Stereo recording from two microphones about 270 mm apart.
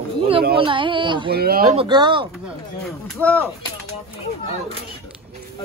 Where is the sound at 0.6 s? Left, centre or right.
Centre.